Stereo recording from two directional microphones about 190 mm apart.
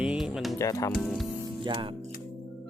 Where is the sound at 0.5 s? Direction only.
15° left (ahead or behind).